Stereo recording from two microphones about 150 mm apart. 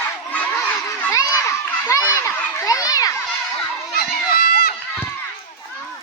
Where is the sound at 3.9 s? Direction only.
85° left.